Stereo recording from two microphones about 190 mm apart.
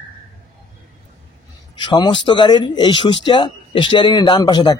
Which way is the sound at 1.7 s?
20° left (ahead or behind).